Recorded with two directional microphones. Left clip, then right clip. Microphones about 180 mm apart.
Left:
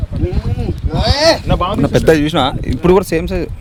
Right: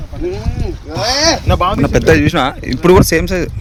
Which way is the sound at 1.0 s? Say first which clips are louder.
Left 1 dB; 40° left (ahead or behind).